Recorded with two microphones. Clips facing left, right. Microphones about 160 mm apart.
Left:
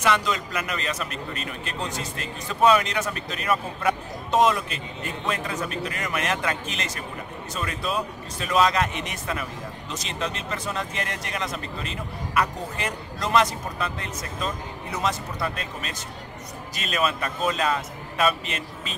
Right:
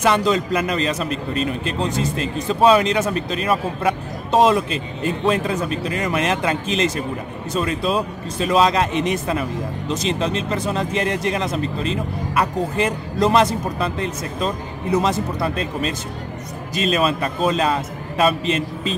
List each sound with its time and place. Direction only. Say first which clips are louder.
0.0 s a man's voice: right 6 dB; 30° right (ahead or behind)